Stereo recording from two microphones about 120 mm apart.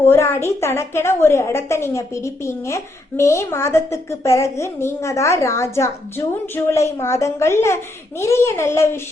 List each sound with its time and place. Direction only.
0.0 s a woman's voice: 20° left (ahead or behind)